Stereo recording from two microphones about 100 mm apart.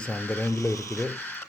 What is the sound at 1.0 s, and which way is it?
Speech, 20° left (ahead or behind).